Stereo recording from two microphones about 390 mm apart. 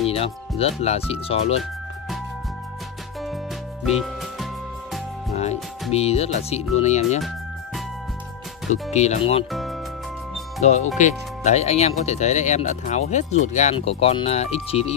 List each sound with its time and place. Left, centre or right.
0.1 s speech: centre
3.8 s music: centre
5.3 s speech: centre
8.9 s speech: centre
9.5 s music: centre
10.6 s speech: centre